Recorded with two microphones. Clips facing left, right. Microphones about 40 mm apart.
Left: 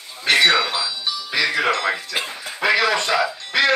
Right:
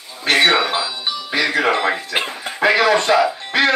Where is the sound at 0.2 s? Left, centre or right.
Right.